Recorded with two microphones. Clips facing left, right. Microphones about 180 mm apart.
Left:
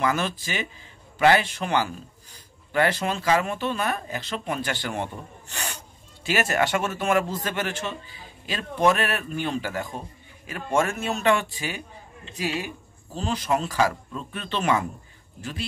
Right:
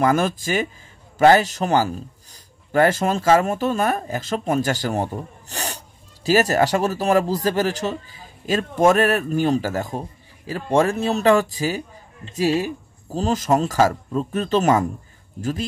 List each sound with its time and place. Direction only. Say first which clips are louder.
0.0 s speech: right 6 dB; 45° right (ahead or behind)